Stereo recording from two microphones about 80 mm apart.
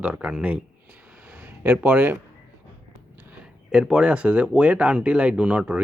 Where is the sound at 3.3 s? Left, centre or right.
Centre.